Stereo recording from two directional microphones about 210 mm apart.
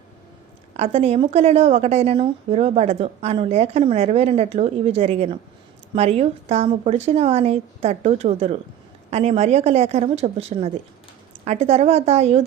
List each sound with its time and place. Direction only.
0.8 s a woman's voice: 30° right (ahead or behind)